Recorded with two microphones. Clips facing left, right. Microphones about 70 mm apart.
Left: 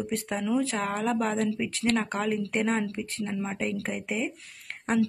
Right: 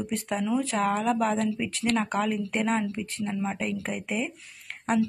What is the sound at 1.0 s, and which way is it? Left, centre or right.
Speech, left.